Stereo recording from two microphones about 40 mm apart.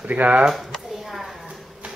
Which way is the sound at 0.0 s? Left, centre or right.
Right.